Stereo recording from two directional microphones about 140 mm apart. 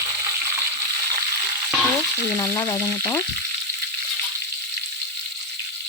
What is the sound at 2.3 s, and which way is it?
Frying, 15° left (ahead or behind).